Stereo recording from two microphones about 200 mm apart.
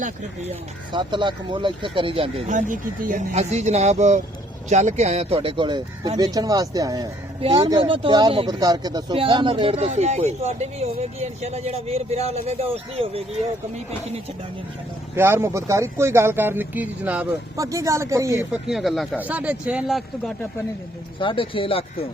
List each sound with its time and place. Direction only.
0.9 s speech: 20° right (ahead or behind)
15.1 s speech: 10° right (ahead or behind)
18.5 s speech: centre (ahead or behind)
21.2 s speech: 25° left (ahead or behind)